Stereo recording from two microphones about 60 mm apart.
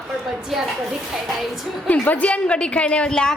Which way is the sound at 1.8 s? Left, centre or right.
Left.